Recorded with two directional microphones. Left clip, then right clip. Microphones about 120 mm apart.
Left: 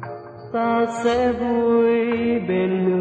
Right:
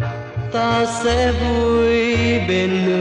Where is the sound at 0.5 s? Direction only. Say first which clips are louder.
Right 2 dB; 35° left (ahead or behind).